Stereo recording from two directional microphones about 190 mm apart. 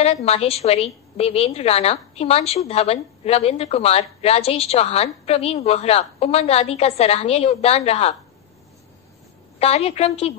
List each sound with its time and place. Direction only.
0.0 s a woman's voice: 30° left (ahead or behind)
9.6 s a woman's voice: 30° left (ahead or behind)